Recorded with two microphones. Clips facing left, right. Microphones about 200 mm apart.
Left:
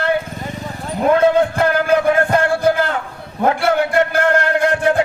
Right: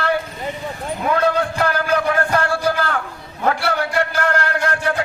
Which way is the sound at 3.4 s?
55° left (ahead or behind).